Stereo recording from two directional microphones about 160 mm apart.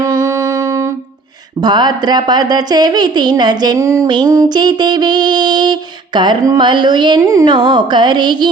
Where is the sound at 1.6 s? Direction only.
25° right (ahead or behind).